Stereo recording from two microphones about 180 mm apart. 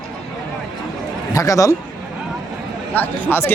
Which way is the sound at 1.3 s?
20° left (ahead or behind).